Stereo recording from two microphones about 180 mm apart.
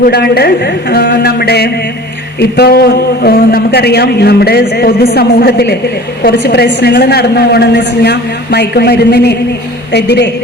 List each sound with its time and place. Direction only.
0.1 s a man's voice: 60° left (ahead or behind)